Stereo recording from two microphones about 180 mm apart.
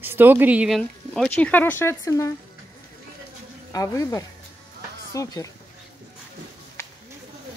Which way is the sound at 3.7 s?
20° left (ahead or behind).